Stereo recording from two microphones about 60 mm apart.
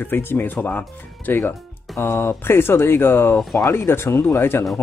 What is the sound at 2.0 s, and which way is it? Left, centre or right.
Speech, left.